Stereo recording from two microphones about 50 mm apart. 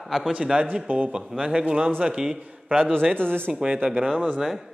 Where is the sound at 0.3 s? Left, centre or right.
Centre.